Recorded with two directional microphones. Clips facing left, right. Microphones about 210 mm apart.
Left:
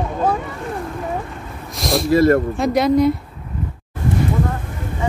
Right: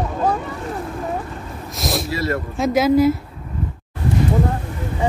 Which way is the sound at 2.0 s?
50° left (ahead or behind).